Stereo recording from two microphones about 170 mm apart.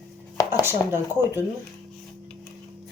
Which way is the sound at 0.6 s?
15° right (ahead or behind).